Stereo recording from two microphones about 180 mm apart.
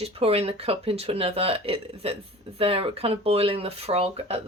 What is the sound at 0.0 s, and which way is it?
Speech, 30° right (ahead or behind).